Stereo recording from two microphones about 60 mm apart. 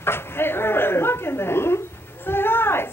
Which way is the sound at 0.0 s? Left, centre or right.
Left.